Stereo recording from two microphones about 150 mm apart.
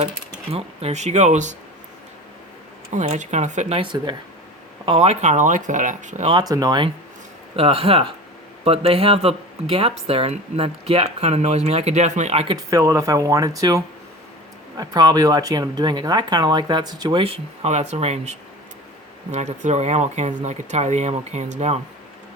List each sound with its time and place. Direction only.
0.5 s speech: 45° right (ahead or behind)
2.9 s speech: 55° right (ahead or behind); by 5.1 s 35° right (ahead or behind)
5.2 s speech: 55° right (ahead or behind)
6.5 s speech: 25° right (ahead or behind)
7.5 s speech: 40° right (ahead or behind)
12.5 s speech: 20° right (ahead or behind); by 21.8 s 45° right (ahead or behind)